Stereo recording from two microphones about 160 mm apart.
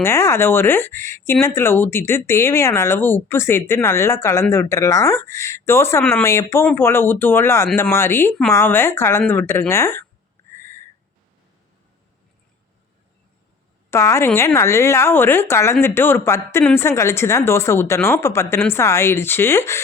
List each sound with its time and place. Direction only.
0.0 s speech: 15° left (ahead or behind)
10.5 s a sound: 15° left (ahead or behind)
13.9 s speech: 15° left (ahead or behind)